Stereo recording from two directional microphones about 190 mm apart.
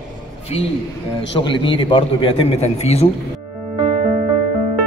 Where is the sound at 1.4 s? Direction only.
25° left (ahead or behind).